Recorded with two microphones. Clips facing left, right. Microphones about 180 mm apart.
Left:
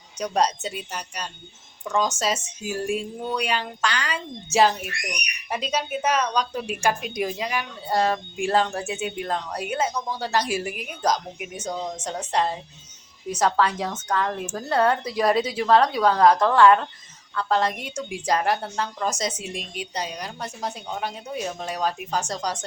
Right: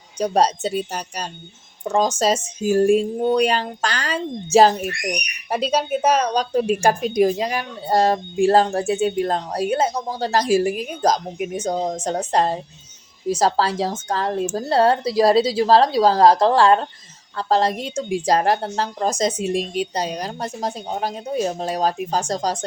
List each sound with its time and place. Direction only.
0.2 s speech: 35° right (ahead or behind)